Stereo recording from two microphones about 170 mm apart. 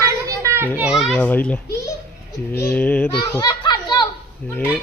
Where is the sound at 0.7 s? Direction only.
5° right (ahead or behind).